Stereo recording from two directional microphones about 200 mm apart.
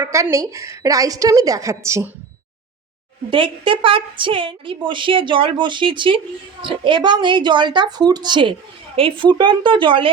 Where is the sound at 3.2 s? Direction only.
25° right (ahead or behind).